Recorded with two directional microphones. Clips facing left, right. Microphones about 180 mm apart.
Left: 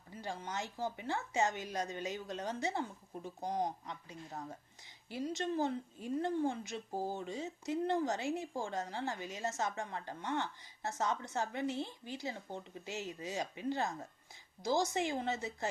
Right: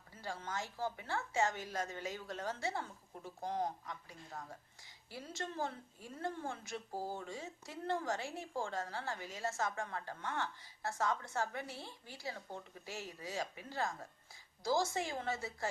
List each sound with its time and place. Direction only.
0.1 s a woman's voice: 20° left (ahead or behind)